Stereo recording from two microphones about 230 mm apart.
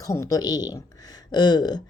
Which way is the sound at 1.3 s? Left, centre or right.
Centre.